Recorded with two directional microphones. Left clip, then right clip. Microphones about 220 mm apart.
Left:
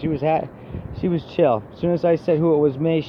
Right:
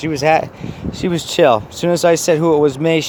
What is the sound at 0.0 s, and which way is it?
Speech, 25° right (ahead or behind).